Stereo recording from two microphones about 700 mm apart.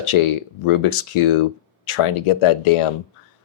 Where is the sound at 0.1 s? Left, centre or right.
Left.